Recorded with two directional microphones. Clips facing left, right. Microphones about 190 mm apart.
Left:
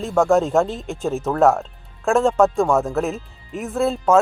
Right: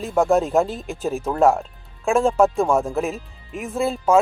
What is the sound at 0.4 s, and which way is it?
Speech, centre (ahead or behind).